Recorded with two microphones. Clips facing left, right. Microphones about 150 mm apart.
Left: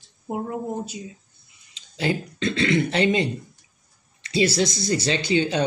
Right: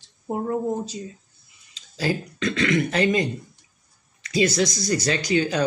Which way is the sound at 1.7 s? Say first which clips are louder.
Even; 25° left (ahead or behind).